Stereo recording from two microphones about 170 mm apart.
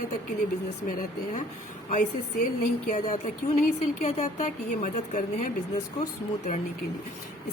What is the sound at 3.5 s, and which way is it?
Speech, 45° left (ahead or behind).